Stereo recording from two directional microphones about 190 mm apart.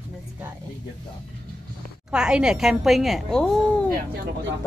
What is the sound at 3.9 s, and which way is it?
Speech, 55° right (ahead or behind).